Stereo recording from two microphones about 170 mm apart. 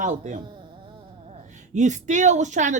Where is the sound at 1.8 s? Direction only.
45° right (ahead or behind).